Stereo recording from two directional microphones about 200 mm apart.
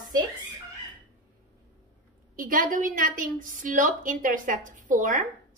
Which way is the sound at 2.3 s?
45° right (ahead or behind).